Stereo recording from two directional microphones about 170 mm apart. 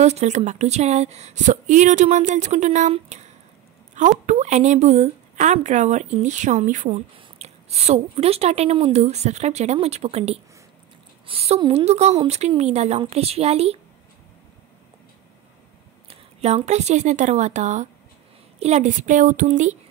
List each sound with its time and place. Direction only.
0.0 s a woman's voice: 40° right (ahead or behind)
16.1 s a woman's voice: 40° right (ahead or behind)